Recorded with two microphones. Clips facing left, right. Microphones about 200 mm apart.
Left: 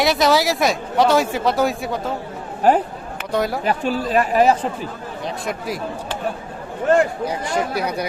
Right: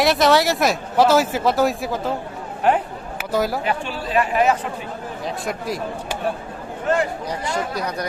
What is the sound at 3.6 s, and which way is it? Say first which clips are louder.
Speech: left 4 dB; 40° left (ahead or behind).